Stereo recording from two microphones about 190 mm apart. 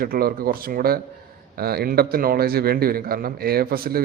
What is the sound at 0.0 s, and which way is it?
Speech, 50° right (ahead or behind).